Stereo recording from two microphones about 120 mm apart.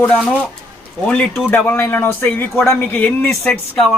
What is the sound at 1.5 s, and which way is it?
Speech, 15° left (ahead or behind).